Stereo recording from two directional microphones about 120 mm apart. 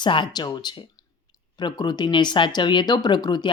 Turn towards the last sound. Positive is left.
turn(degrees=35)  # may be behind; listen again after turning